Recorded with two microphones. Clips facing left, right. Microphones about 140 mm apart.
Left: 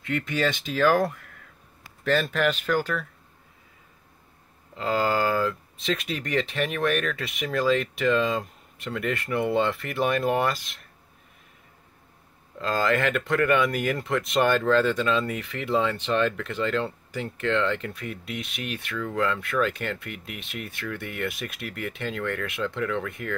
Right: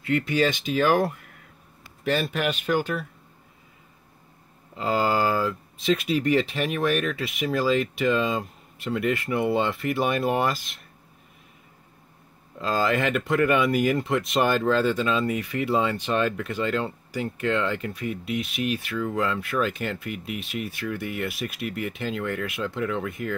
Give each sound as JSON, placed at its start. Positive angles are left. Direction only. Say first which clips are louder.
{"t": 0.3, "sound": "speech", "louder": "right 1 dB", "side_deg": -20}
{"t": 4.7, "sound": "speech", "louder": "right 1 dB", "side_deg": -10}
{"t": 12.5, "sound": "speech", "louder": "even", "side_deg": -10}